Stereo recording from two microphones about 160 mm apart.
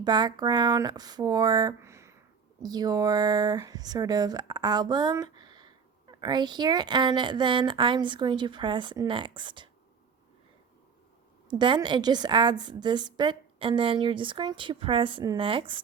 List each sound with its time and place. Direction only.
0.0 s speech: 25° right (ahead or behind)
11.4 s a woman's voice: 30° right (ahead or behind)